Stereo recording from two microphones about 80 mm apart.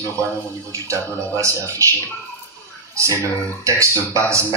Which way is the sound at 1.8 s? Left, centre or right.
Right.